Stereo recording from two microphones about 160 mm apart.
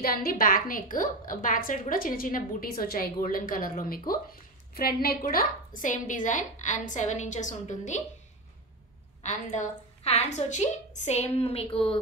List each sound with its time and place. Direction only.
0.0 s a woman's voice: 65° left (ahead or behind); by 8.0 s 50° left (ahead or behind)
9.2 s a woman's voice: 50° left (ahead or behind)